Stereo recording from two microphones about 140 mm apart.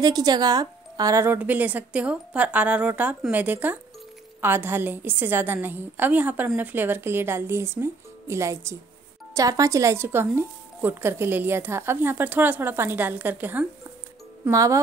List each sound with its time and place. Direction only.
0.0 s speech: 30° right (ahead or behind); by 13.7 s 10° right (ahead or behind)
14.4 s speech: 25° right (ahead or behind)